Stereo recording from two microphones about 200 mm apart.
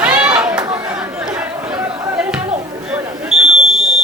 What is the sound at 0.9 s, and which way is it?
Chatter, 5° right (ahead or behind).